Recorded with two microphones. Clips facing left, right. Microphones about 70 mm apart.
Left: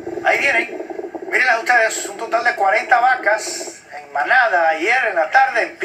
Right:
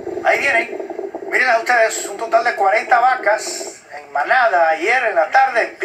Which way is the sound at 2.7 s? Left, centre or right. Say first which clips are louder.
Right 1 dB; right.